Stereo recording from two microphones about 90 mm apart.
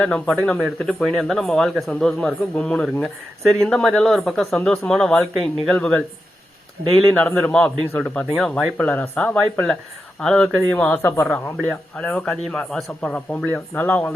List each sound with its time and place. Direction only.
0.0 s speech: 5° left (ahead or behind)
7.2 s speech: 10° left (ahead or behind)
8.8 s speech: 15° left (ahead or behind)
10.7 s speech: 20° left (ahead or behind)
11.6 s speech: 10° left (ahead or behind)
13.1 s speech: 25° left (ahead or behind)